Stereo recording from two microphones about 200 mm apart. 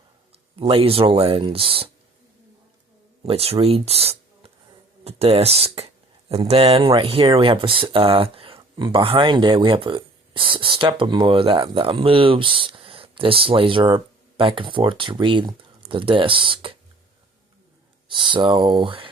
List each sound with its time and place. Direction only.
0.5 s speech: 25° right (ahead or behind)
3.2 s speech: 30° right (ahead or behind)
18.1 s speech: 25° right (ahead or behind)